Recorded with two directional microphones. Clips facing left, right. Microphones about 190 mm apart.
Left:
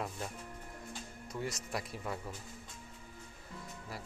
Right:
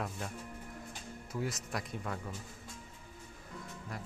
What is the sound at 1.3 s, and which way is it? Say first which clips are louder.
A man's voice: right 1 dB; centre (ahead or behind).